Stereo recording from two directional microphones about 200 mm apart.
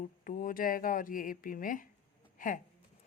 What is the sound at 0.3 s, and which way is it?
Speech, 45° left (ahead or behind).